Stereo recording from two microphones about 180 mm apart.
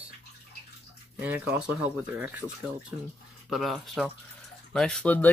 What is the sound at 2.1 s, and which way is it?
Speech, 10° right (ahead or behind).